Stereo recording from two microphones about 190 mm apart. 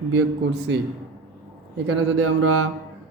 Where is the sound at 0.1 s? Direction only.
75° right (ahead or behind).